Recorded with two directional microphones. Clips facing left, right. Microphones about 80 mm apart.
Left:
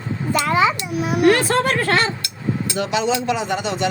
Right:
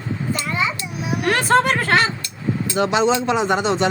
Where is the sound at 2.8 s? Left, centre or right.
Right.